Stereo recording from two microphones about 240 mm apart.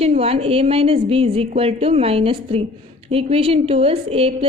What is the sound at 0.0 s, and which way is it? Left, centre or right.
A woman's voice, right.